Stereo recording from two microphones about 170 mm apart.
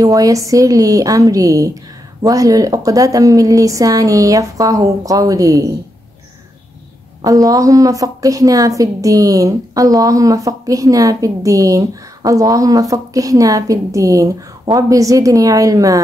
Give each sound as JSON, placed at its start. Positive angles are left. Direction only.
{"t": 0.0, "sound": "a woman's voice", "side_deg": -20}
{"t": 7.2, "sound": "a woman's voice", "side_deg": -20}